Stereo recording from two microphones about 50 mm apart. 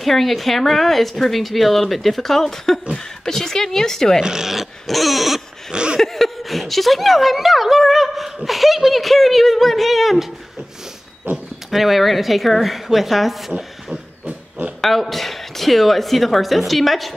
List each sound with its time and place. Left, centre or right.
0.0 s speech: centre
4.2 s speech: centre
5.7 s a sound: centre
5.9 s a woman's voice: centre
11.7 s speech: centre
14.8 s speech: centre